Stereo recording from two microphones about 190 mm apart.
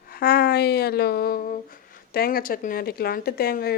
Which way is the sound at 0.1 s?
55° left (ahead or behind).